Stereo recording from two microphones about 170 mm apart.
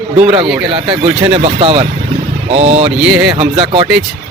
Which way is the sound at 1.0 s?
35° right (ahead or behind).